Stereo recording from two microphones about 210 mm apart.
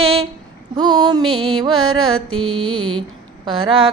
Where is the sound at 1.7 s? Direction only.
80° right.